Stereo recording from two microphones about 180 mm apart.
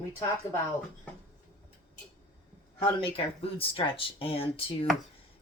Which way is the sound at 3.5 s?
30° left (ahead or behind).